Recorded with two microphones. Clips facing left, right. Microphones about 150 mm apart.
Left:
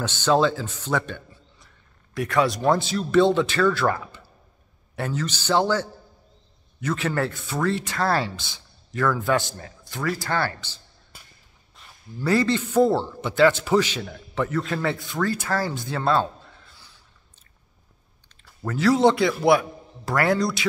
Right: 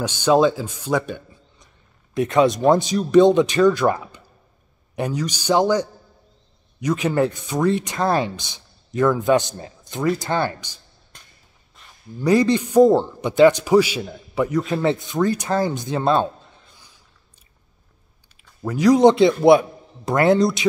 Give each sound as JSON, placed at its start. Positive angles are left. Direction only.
{"t": 0.0, "sound": "a man's voice", "side_deg": -15}
{"t": 11.1, "sound": "walk", "side_deg": 5}
{"t": 11.8, "sound": "a sound", "side_deg": 0}
{"t": 12.2, "sound": "a man's voice", "side_deg": -15}
{"t": 18.4, "sound": "speech", "side_deg": -15}